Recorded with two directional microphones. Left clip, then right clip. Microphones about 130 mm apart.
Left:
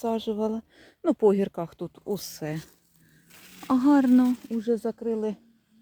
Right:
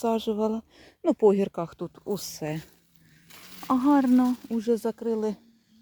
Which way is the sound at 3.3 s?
25° right (ahead or behind).